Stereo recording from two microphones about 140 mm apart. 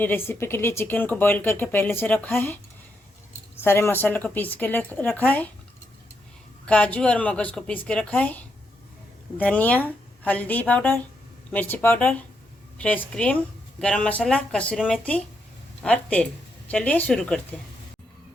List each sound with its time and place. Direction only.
0.3 s speech: 15° left (ahead or behind)
3.6 s speech: 15° left (ahead or behind)
6.7 s speech: 10° left (ahead or behind)
15.8 s speech: 10° left (ahead or behind)